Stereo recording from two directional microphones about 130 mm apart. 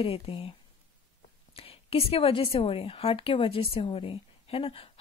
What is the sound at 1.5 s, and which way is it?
A woman's voice, 45° left (ahead or behind).